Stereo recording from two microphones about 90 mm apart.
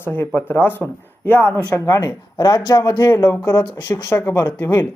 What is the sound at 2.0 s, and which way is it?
Speech, 45° left (ahead or behind).